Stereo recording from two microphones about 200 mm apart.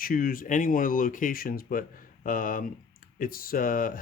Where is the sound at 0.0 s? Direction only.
45° left (ahead or behind).